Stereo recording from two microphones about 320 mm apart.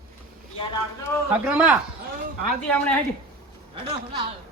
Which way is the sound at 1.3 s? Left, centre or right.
Centre.